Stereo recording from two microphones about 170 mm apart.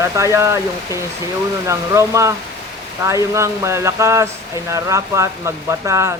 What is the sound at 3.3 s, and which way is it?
Speech, 15° right (ahead or behind).